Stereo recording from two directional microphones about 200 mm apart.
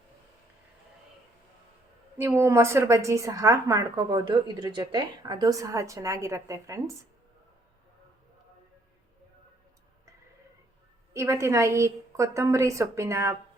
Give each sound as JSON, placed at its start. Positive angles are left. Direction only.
{"t": 2.1, "sound": "a woman's voice", "side_deg": -10}
{"t": 11.1, "sound": "a woman's voice", "side_deg": -15}